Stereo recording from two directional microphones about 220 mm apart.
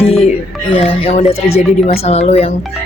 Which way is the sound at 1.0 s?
25° left (ahead or behind).